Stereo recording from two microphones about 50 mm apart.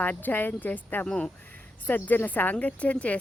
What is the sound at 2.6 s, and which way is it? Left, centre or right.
Speech, left.